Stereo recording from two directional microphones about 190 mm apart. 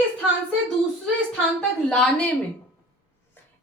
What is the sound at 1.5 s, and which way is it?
Speech, 5° left (ahead or behind).